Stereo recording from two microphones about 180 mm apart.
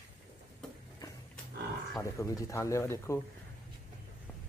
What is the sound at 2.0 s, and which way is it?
A man's voice, 15° left (ahead or behind).